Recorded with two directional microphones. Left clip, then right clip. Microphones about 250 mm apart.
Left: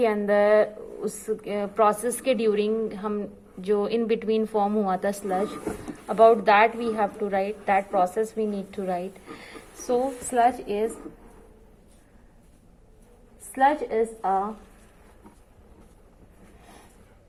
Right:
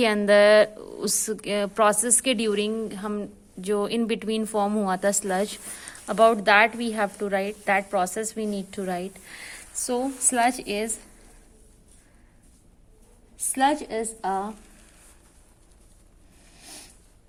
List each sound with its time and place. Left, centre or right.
0.0 s a woman's voice: right
13.5 s a woman's voice: right